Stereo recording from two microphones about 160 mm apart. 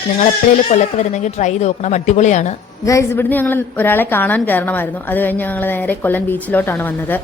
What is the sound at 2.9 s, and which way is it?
A woman's voice, 15° left (ahead or behind).